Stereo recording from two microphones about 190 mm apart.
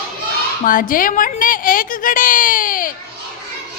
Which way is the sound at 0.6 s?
45° left (ahead or behind).